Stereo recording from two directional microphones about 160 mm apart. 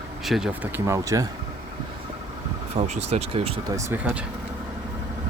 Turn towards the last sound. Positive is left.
turn(degrees=-10)  # may be behind; listen again after turning